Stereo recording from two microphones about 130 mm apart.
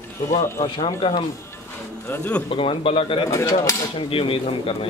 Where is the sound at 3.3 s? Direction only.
25° left (ahead or behind).